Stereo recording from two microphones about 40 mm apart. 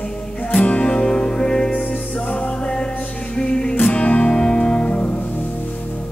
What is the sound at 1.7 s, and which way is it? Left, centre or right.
Music, left.